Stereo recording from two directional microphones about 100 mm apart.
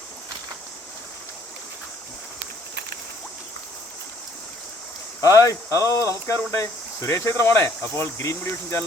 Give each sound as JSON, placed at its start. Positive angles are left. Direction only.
{"t": 5.2, "sound": "speech", "side_deg": 35}